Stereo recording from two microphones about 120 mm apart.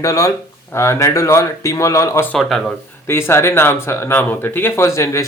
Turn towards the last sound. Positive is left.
turn(degrees=25)  # may be behind; listen again after turning